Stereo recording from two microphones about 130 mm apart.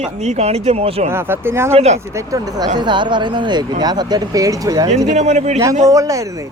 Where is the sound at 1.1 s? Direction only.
20° right (ahead or behind).